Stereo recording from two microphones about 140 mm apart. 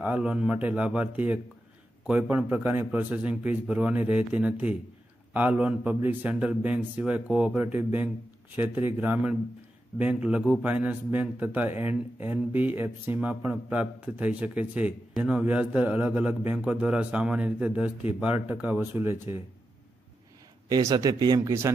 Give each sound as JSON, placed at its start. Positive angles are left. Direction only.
{"t": 0.0, "sound": "a man's voice", "side_deg": -10}
{"t": 20.6, "sound": "speech", "side_deg": -25}